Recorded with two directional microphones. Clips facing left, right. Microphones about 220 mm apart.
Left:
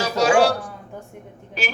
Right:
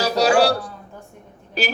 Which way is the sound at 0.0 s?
35° right (ahead or behind).